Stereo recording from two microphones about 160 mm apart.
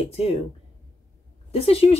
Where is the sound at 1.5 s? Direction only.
40° left (ahead or behind).